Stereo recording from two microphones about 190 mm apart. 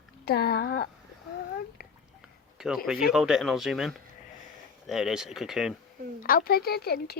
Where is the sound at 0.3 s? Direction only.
55° left (ahead or behind).